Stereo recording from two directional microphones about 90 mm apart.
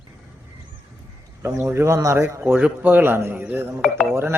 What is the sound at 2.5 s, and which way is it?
Speech, 15° right (ahead or behind).